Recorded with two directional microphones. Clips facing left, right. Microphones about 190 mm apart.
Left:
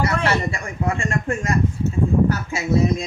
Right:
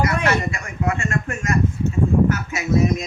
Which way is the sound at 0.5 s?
30° left (ahead or behind).